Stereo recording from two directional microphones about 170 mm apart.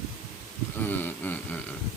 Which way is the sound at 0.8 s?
10° left (ahead or behind).